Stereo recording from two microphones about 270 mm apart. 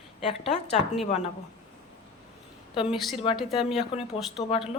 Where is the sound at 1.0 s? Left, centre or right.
Left.